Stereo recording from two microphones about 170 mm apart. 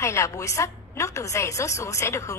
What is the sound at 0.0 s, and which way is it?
A woman's voice, 15° left (ahead or behind).